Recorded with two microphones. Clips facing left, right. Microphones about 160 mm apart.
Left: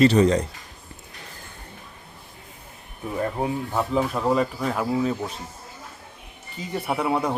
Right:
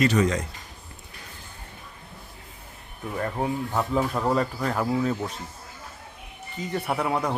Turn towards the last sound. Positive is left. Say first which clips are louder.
# left 2 dB
turn(degrees=5)  # may be behind; listen again after turning